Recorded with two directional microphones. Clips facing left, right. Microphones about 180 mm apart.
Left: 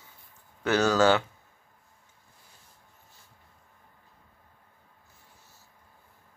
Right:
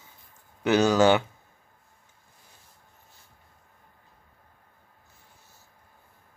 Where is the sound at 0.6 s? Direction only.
15° right (ahead or behind).